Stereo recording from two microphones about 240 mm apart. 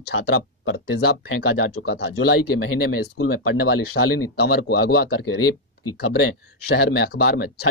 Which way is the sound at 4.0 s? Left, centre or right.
Left.